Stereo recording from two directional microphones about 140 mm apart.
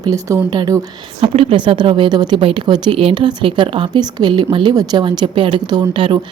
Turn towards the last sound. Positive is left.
turn(degrees=-35)  # may be behind; listen again after turning